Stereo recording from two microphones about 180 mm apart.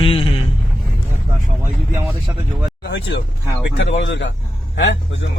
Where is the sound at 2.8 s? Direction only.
85° left.